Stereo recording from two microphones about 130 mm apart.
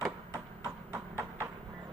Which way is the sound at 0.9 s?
15° right (ahead or behind).